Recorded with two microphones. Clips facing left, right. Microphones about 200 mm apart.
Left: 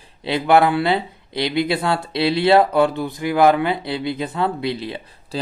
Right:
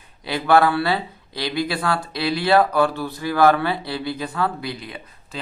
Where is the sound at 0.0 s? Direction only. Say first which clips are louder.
Left 4 dB; 25° left (ahead or behind).